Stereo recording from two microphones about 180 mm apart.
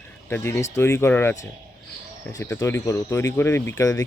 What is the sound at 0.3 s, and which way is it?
Speech, 10° left (ahead or behind).